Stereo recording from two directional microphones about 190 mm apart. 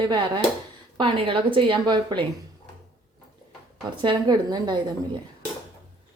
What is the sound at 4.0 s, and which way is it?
A woman's voice, 25° right (ahead or behind).